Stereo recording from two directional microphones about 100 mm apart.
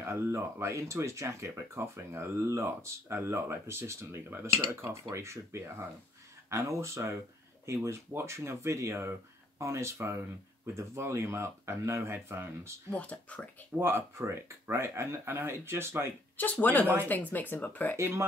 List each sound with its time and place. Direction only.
0.0 s speech: 25° right (ahead or behind)
12.9 s speech: 15° left (ahead or behind)
13.7 s speech: 25° right (ahead or behind)
16.5 s speech: 20° left (ahead or behind)
16.8 s speech: 20° right (ahead or behind)
17.1 s speech: 20° left (ahead or behind)
17.9 s speech: 30° right (ahead or behind)